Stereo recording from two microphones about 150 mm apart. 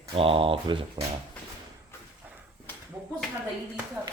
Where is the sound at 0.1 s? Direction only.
40° right (ahead or behind).